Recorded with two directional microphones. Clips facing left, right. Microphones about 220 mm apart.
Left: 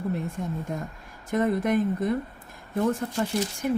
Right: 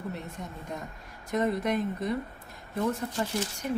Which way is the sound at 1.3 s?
50° left (ahead or behind).